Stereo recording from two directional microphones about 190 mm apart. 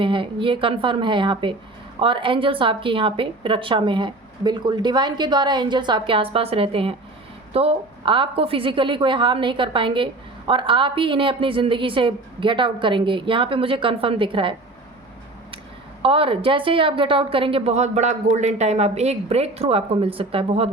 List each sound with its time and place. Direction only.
0.0 s a woman's voice: 25° right (ahead or behind)
16.0 s a woman's voice: 30° right (ahead or behind)